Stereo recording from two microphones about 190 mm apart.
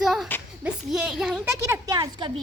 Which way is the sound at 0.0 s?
Centre (ahead or behind).